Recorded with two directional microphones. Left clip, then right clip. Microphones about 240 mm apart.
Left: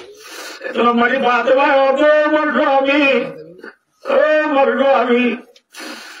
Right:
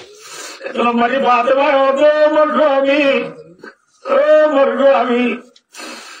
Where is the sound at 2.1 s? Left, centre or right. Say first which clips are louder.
Right 2 dB; left.